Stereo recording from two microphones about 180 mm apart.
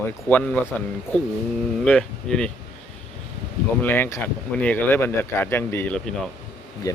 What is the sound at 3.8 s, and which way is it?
Speech, 10° left (ahead or behind).